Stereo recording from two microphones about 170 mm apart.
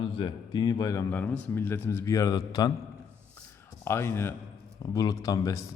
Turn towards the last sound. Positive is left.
turn(degrees=20)  # may be behind; listen again after turning